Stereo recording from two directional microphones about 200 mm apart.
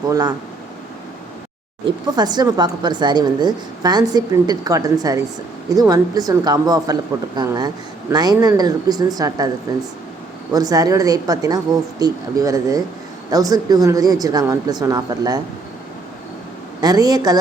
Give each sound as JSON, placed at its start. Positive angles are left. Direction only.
{"t": 0.1, "sound": "a woman's voice", "side_deg": -20}
{"t": 2.0, "sound": "a woman's voice", "side_deg": -20}
{"t": 10.5, "sound": "a woman's voice", "side_deg": -20}
{"t": 16.8, "sound": "a woman's voice", "side_deg": -20}